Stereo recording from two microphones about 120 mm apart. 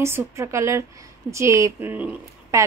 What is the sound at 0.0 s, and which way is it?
A woman's voice, 25° right (ahead or behind).